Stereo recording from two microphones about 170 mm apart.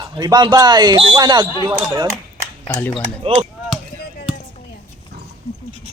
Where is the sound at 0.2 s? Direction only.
25° right (ahead or behind).